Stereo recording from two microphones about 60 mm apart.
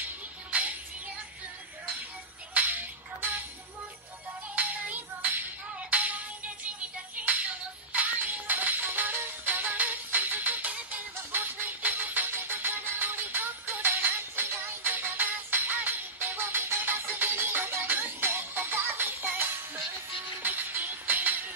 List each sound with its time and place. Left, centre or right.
0.5 s music: right
2.5 s music: right
4.6 s music: right
14.5 s music: right
14.8 s music: right